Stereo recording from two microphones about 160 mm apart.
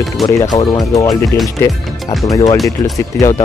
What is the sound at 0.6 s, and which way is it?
Speech, 25° left (ahead or behind).